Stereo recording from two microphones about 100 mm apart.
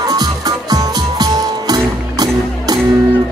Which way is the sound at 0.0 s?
40° right (ahead or behind).